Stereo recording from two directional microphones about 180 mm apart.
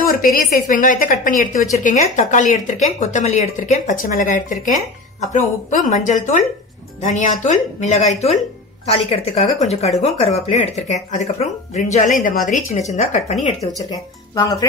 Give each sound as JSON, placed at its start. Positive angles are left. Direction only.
{"t": 0.0, "sound": "a woman's voice", "side_deg": 55}
{"t": 13.8, "sound": "speech", "side_deg": 20}